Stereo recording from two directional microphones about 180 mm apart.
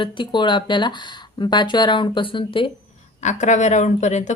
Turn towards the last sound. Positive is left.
turn(degrees=40)  # may be behind; listen again after turning